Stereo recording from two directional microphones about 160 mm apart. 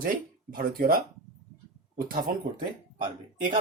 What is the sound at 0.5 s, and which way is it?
Speech, 60° right (ahead or behind).